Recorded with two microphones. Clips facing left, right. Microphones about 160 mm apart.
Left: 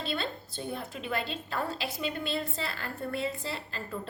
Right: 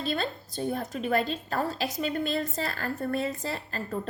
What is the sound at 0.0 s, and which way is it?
A woman's voice, 45° right (ahead or behind).